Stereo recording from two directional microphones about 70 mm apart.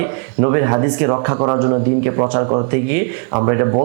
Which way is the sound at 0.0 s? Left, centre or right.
Right.